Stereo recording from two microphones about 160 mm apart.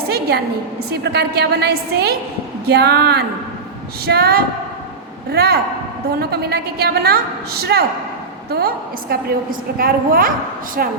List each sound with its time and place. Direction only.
0.1 s a sound: 90° right
0.9 s a woman's voice: 90° right
4.0 s a woman's voice: 80° right